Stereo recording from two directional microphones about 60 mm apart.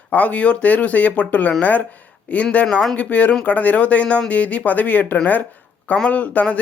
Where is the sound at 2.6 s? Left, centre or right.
Centre.